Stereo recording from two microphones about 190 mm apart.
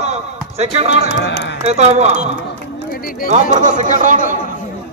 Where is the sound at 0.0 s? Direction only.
35° right (ahead or behind).